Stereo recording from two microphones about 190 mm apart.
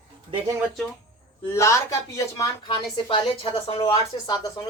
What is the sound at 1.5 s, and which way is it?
A woman's voice, 15° left (ahead or behind).